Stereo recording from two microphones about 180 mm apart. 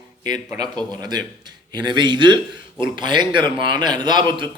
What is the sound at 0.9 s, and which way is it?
A man's voice, 20° right (ahead or behind).